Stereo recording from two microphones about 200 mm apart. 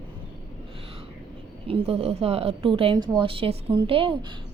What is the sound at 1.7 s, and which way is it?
A woman's voice, 30° right (ahead or behind).